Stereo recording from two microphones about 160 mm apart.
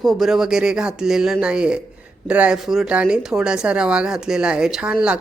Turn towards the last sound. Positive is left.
turn(degrees=-5)  # may be behind; listen again after turning